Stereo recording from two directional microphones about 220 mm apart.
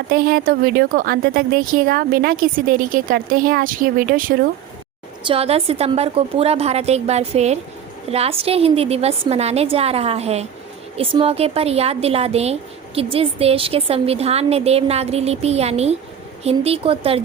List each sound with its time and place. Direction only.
0.1 s speech: 45° right (ahead or behind)
5.2 s a woman's voice: 25° right (ahead or behind)